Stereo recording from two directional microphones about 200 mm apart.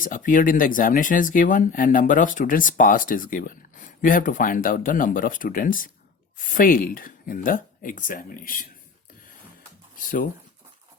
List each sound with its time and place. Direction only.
0.0 s speech: 40° left (ahead or behind)
10.0 s speech: 45° left (ahead or behind)